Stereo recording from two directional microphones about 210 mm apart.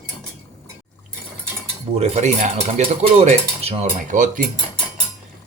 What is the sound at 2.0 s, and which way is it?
Cutlery, 30° right (ahead or behind).